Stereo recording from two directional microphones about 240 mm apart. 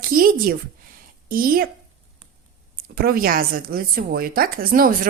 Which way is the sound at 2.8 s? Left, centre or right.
Right.